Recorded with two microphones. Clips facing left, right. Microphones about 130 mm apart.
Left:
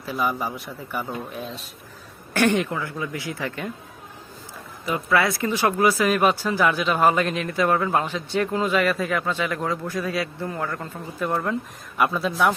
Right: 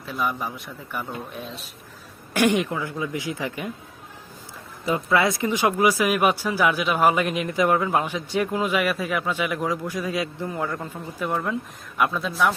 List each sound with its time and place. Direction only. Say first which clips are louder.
0.0 s a man's voice: left 2 dB; 5° left (ahead or behind)
2.3 s speech: even; 15° right (ahead or behind)
4.9 s speech: right 1 dB; 25° right (ahead or behind)
11.9 s a man's voice: left 1 dB; centre (ahead or behind)